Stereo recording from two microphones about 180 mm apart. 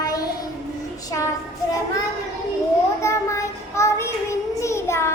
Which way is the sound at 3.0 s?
15° left (ahead or behind).